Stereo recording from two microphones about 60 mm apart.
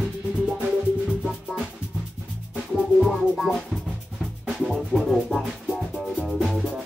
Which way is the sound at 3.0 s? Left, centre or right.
Centre.